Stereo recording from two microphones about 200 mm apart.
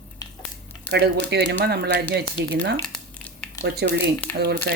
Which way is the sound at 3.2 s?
5° left (ahead or behind).